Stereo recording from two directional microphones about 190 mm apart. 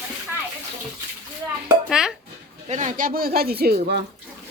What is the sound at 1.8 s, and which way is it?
Speech, 5° right (ahead or behind).